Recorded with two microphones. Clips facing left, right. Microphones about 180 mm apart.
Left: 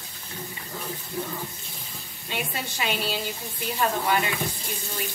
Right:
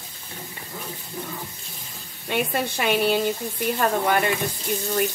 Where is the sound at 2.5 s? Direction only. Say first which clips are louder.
Right 6 dB; 55° right (ahead or behind).